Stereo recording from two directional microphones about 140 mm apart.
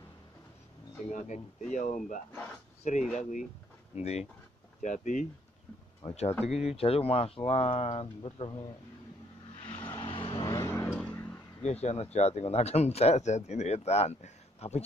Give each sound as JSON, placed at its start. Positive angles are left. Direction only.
{"t": 1.1, "sound": "speech", "side_deg": 60}
{"t": 4.8, "sound": "speech", "side_deg": 60}
{"t": 6.0, "sound": "speech", "side_deg": 45}
{"t": 9.8, "sound": "vehicle", "side_deg": 35}
{"t": 10.5, "sound": "vehicle", "side_deg": 20}
{"t": 11.6, "sound": "speech", "side_deg": 50}